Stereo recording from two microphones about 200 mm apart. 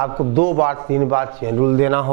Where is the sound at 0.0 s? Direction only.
25° right (ahead or behind).